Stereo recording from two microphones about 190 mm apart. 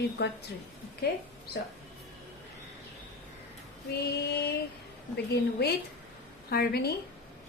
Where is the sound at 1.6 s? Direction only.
60° left (ahead or behind).